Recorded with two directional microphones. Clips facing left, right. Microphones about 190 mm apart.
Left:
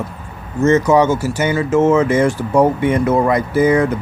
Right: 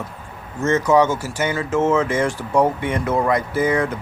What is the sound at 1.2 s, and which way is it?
Speech, 5° left (ahead or behind).